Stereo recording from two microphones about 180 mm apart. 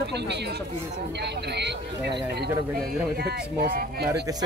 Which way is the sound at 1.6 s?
70° right (ahead or behind).